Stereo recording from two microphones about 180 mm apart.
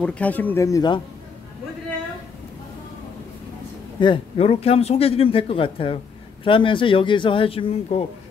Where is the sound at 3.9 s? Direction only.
25° left (ahead or behind).